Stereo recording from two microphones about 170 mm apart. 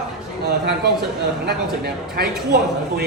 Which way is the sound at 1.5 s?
70° right (ahead or behind).